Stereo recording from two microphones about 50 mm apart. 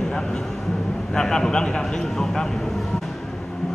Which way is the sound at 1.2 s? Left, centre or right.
Centre.